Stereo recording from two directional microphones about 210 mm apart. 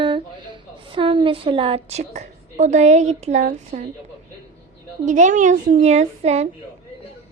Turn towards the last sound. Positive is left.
turn(degrees=-30)  # may be behind; listen again after turning